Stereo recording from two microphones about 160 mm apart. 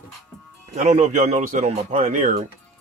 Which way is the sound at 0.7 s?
50° right (ahead or behind).